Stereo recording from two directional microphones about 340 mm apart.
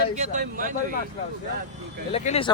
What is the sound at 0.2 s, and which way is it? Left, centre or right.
Speech, right.